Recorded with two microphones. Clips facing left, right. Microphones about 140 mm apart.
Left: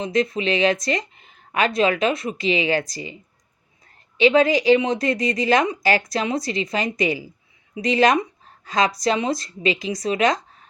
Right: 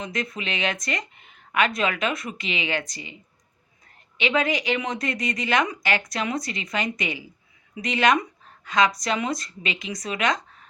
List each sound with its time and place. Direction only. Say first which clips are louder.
0.0 s speech: left 9 dB; 30° left (ahead or behind)
4.2 s speech: left 8 dB; 30° left (ahead or behind)